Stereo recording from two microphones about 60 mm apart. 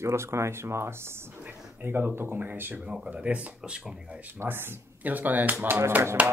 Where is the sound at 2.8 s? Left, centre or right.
Centre.